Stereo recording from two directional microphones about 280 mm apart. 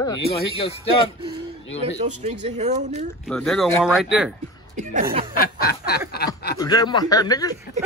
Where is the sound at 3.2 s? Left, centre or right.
Centre.